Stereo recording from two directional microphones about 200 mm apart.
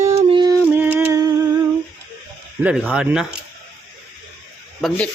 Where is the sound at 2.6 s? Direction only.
5° right (ahead or behind).